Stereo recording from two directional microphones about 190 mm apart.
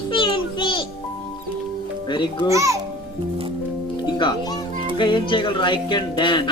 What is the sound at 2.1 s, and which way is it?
Speech, 25° left (ahead or behind).